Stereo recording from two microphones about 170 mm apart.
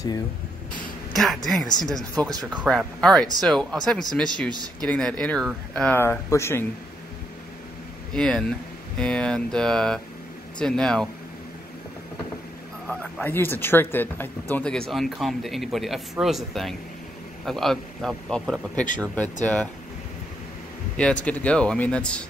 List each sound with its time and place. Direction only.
1.1 s speech: centre (ahead or behind)
4.5 s speech: 25° right (ahead or behind)
4.8 s speech: 5° left (ahead or behind)
8.1 s speech: 5° left (ahead or behind)
12.8 s speech: 5° left (ahead or behind)
20.9 s speech: 5° left (ahead or behind)